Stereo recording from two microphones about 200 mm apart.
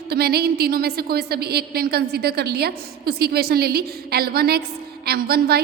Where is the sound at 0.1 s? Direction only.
50° right (ahead or behind).